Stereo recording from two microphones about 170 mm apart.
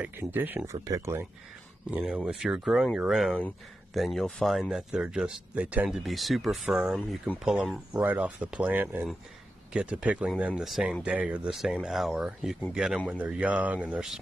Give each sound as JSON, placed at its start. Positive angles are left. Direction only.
{"t": 0.0, "sound": "speech", "side_deg": -10}